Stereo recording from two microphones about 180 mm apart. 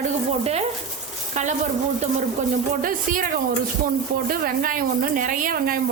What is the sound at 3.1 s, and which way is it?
Speech, 50° right (ahead or behind).